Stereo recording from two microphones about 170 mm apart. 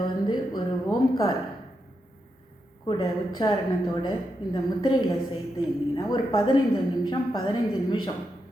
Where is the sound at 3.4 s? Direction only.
30° left (ahead or behind).